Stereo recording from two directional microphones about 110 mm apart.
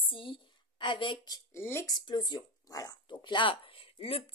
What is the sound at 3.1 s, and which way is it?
Speech, 45° left (ahead or behind).